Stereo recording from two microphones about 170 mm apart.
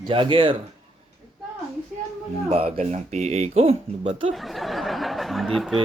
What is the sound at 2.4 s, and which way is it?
Speech, 35° right (ahead or behind).